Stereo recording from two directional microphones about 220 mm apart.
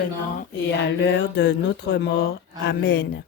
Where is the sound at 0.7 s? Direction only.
50° left (ahead or behind).